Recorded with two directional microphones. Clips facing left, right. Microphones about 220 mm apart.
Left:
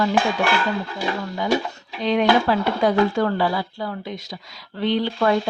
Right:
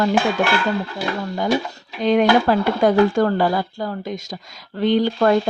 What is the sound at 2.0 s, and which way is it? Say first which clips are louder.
Speech: right 3 dB; 45° right (ahead or behind).